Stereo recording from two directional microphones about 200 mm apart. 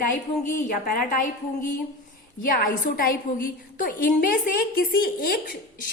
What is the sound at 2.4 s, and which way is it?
A woman's voice, 45° left (ahead or behind).